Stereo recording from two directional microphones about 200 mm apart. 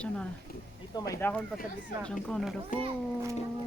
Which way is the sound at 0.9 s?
15° left (ahead or behind).